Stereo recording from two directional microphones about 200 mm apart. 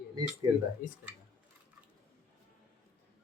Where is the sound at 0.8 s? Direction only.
45° left (ahead or behind).